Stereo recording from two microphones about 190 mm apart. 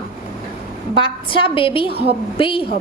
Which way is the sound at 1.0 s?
25° left (ahead or behind).